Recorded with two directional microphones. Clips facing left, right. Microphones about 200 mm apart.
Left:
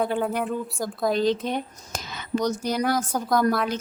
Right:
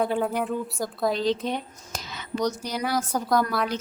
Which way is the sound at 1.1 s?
50° left (ahead or behind).